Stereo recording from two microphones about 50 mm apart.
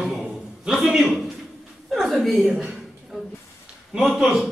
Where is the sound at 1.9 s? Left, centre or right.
Centre.